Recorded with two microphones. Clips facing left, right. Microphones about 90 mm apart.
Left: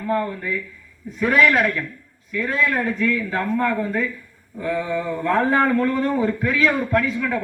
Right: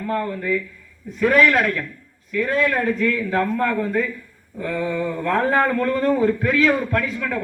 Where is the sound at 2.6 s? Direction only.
5° left (ahead or behind).